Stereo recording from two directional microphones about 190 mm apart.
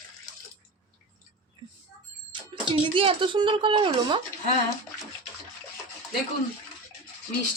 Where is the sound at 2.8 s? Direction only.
25° right (ahead or behind).